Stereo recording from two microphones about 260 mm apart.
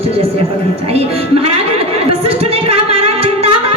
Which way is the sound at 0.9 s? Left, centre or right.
Right.